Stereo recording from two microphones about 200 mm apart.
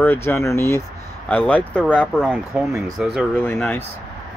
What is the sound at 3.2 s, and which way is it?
Speech, 5° left (ahead or behind).